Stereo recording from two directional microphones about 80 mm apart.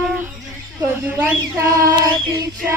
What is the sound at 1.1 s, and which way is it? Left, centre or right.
Speech, centre.